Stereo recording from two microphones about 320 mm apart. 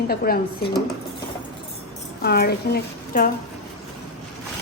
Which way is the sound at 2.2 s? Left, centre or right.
Left.